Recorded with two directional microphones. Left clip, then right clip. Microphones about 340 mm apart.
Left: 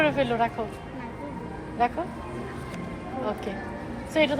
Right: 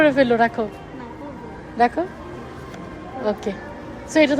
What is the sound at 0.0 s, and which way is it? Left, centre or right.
Speech, centre.